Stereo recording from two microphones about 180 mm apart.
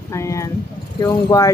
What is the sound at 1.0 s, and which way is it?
Speech, 20° left (ahead or behind).